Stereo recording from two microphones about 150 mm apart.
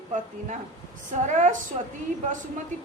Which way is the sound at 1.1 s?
55° right (ahead or behind).